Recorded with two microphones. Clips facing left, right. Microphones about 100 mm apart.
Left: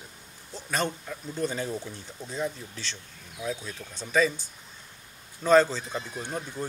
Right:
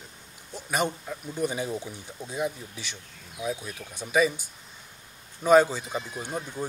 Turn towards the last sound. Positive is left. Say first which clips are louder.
# right 1 dB
turn(degrees=-10)  # may be behind; listen again after turning